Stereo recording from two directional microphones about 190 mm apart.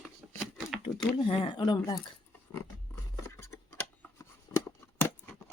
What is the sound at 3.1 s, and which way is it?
Music, 15° left (ahead or behind).